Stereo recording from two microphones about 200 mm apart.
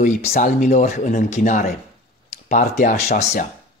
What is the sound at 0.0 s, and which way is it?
Speech, 35° left (ahead or behind).